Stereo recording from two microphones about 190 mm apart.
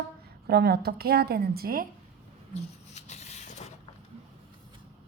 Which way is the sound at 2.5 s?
35° left (ahead or behind).